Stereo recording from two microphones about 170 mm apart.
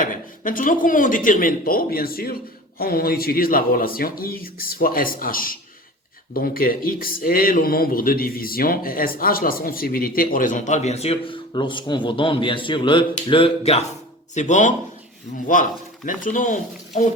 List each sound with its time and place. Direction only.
0.0 s speech: 55° left (ahead or behind); by 13.8 s 35° left (ahead or behind)
14.3 s speech: 45° left (ahead or behind)